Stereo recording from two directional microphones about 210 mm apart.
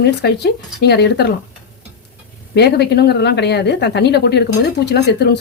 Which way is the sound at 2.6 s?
50° left (ahead or behind).